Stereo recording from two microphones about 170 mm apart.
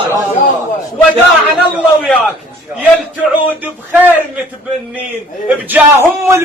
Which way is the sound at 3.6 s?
10° right (ahead or behind).